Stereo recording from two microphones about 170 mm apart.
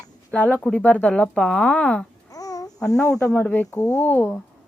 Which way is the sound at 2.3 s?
20° left (ahead or behind).